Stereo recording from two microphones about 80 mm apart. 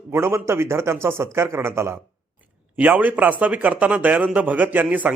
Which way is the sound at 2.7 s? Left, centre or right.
Centre.